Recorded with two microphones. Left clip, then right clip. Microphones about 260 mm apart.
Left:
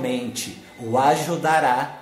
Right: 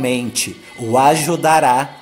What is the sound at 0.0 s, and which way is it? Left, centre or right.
A man's voice, right.